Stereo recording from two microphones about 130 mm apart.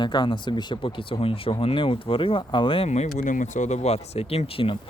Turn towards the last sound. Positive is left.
turn(degrees=45)  # may be behind; listen again after turning